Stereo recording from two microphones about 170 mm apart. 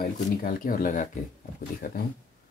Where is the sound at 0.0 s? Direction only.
55° left (ahead or behind).